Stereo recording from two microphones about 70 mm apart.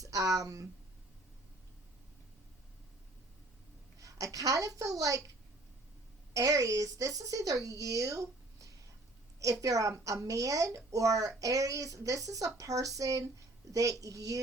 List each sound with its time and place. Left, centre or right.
0.0 s speech: right
4.0 s a woman's voice: right
6.3 s a woman's voice: right